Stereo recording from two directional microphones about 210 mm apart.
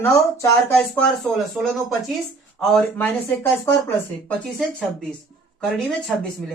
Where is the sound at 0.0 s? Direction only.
10° left (ahead or behind).